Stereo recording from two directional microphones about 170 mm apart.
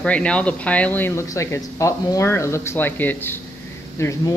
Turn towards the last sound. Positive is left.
turn(degrees=15)  # may be behind; listen again after turning